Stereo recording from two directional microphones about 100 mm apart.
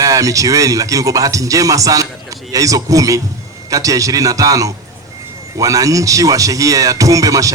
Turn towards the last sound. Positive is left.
turn(degrees=-35)  # may be behind; listen again after turning